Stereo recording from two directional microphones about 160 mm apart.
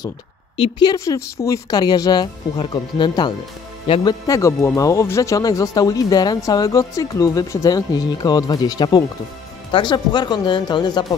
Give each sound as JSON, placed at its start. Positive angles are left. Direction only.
{"t": 0.6, "sound": "speech", "side_deg": 25}